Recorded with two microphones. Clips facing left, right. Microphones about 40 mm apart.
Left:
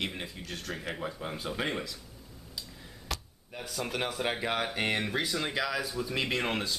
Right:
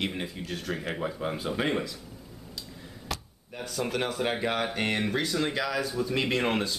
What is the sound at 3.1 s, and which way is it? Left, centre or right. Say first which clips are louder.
Speech: right 2 dB; centre.